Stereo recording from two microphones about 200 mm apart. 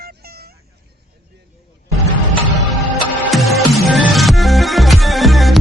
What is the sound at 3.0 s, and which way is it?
Music, centre (ahead or behind).